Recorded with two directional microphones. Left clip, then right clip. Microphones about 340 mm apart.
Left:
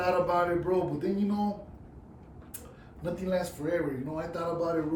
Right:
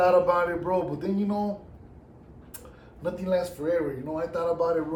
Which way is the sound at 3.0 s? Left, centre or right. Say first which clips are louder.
Right 4 dB; centre.